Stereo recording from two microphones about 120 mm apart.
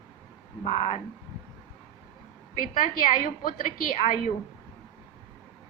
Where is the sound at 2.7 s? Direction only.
90° left.